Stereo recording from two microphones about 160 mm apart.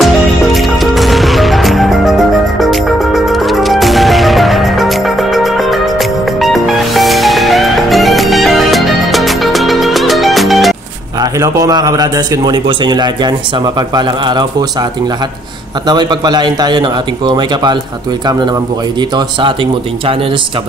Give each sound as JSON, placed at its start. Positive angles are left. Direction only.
{"t": 0.0, "sound": "music", "side_deg": 0}
{"t": 11.3, "sound": "a man's voice", "side_deg": -20}
{"t": 15.9, "sound": "a man's voice", "side_deg": -25}
{"t": 18.9, "sound": "a man's voice", "side_deg": -30}